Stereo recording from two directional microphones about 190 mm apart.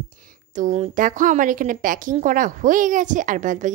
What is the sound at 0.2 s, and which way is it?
A woman's voice, 40° right (ahead or behind).